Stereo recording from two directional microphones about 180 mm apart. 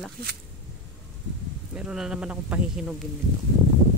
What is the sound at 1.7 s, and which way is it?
Speech, 5° right (ahead or behind).